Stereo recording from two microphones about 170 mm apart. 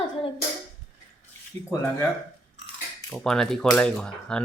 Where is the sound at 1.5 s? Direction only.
35° right (ahead or behind).